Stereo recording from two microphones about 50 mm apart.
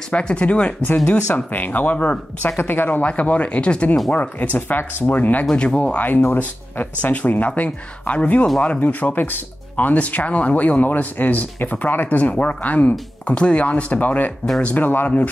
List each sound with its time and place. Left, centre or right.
0.1 s speech: left
1.3 s speech: left
2.4 s speech: left
3.0 s speech: left
5.6 s speech: left
5.9 s speech: left